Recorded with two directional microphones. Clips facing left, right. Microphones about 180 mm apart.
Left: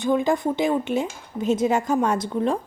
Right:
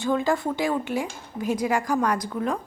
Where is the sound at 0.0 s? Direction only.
20° left (ahead or behind).